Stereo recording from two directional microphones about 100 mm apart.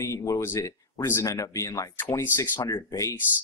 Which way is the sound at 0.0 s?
30° left (ahead or behind).